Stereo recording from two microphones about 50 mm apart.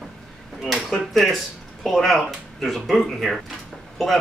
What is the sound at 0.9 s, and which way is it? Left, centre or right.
Speech, centre.